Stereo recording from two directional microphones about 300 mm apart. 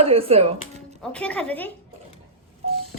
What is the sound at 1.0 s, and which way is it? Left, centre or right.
Speech, centre.